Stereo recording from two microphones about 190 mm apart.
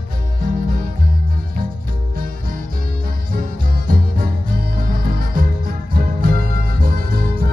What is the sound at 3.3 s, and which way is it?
Music, 50° right (ahead or behind).